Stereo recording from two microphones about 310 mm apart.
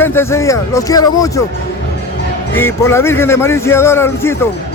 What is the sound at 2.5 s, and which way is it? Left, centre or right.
A man's voice, centre.